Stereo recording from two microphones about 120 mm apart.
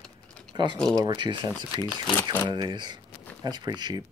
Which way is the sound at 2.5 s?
40° right (ahead or behind).